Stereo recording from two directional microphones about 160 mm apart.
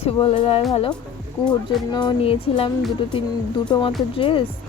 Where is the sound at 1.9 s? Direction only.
30° left (ahead or behind).